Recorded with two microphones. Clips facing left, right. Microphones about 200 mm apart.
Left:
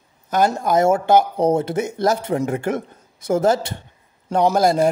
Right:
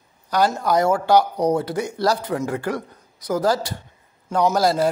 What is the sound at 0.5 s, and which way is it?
A man's voice, 25° left (ahead or behind).